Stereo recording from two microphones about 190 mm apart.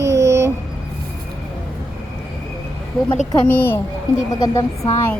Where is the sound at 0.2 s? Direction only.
15° right (ahead or behind).